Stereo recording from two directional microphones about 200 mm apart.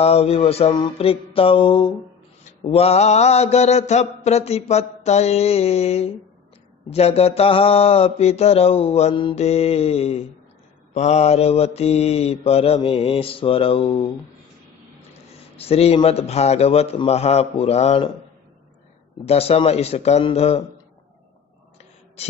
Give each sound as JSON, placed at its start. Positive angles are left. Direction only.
{"t": 0.0, "sound": "mantra", "side_deg": 30}
{"t": 15.5, "sound": "mantra", "side_deg": 30}
{"t": 19.2, "sound": "mantra", "side_deg": 30}